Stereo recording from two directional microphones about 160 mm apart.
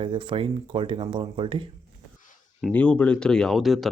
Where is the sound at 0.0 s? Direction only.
30° right (ahead or behind).